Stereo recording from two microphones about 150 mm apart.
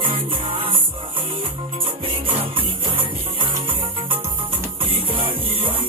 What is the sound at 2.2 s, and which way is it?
Music, 35° right (ahead or behind).